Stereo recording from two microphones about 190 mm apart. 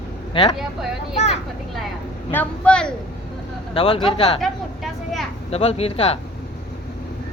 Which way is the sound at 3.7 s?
30° left (ahead or behind).